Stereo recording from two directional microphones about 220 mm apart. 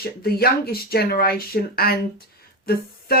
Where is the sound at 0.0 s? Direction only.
45° left (ahead or behind).